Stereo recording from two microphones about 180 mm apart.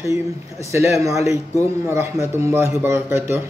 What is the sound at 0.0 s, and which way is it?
Speech, 15° right (ahead or behind).